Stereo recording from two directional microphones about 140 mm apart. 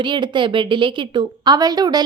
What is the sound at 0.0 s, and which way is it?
A woman's voice, 35° right (ahead or behind).